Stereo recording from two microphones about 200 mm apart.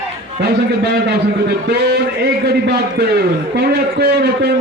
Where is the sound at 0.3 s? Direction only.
55° right (ahead or behind).